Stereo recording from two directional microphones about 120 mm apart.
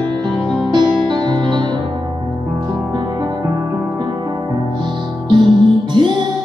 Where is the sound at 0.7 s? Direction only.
40° right (ahead or behind).